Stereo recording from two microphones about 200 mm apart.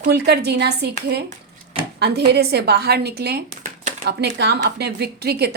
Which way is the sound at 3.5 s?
40° right (ahead or behind).